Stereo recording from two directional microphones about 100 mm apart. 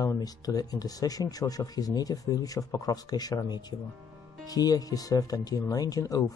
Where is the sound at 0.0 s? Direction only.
35° left (ahead or behind).